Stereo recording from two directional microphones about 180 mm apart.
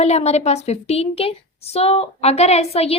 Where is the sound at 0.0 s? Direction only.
35° left (ahead or behind).